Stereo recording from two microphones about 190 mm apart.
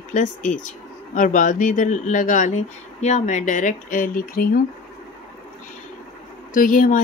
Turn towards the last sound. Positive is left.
turn(degrees=45)  # may be behind; listen again after turning